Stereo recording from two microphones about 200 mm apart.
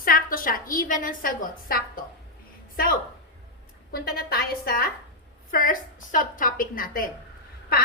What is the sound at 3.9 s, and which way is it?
A woman's voice, 50° left (ahead or behind).